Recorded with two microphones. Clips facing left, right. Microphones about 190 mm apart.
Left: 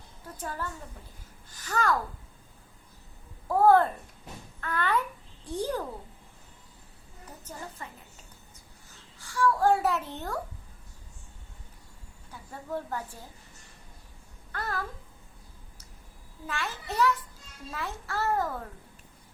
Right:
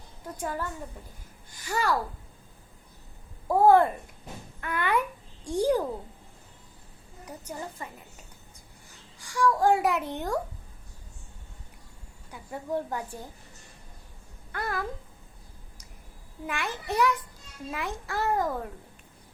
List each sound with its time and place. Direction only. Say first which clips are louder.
0.3 s a child's voice: right 3 dB; 15° right (ahead or behind)
3.5 s a child's voice: right 2 dB; 15° right (ahead or behind)
7.3 s a child's voice: right 5 dB; 10° right (ahead or behind)
9.1 s a child's voice: right 1 dB; 15° right (ahead or behind)
12.3 s a child's voice: right 4 dB; 15° right (ahead or behind)
14.5 s a child's voice: right 2 dB; 15° right (ahead or behind)
16.5 s a child's voice: right 3 dB; 15° right (ahead or behind)